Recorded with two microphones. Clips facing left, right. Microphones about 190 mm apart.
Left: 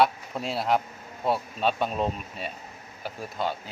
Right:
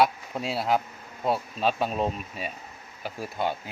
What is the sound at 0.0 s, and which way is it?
Speech, centre (ahead or behind).